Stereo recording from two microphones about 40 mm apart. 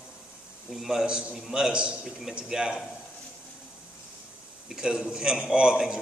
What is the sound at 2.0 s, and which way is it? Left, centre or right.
Speech, centre.